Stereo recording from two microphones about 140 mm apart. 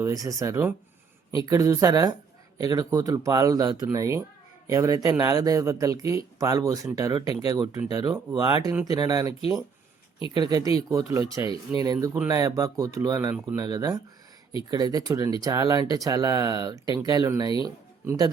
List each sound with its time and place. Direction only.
0.0 s speech: 25° right (ahead or behind)
10.3 s speech: 30° right (ahead or behind)